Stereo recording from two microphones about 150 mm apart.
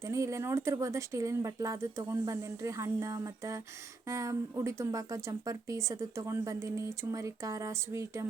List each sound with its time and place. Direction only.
0.0 s speech: 20° right (ahead or behind)